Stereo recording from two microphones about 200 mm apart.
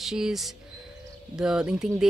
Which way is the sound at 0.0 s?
Centre (ahead or behind).